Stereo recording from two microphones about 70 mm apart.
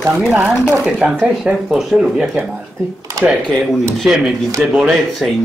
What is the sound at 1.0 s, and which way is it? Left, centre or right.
Speech, right.